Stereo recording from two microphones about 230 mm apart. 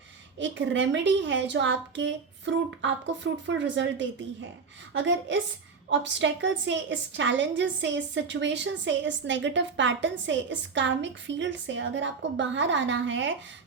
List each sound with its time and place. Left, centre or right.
0.3 s a woman's voice: right